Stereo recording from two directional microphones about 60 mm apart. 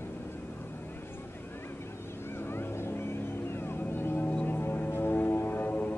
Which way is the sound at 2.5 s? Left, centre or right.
Left.